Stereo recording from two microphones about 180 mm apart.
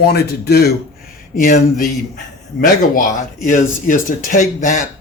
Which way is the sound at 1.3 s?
50° left (ahead or behind).